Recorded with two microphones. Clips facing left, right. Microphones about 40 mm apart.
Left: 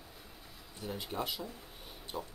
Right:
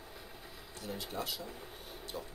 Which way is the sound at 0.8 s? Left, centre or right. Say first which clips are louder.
Left 2 dB; left.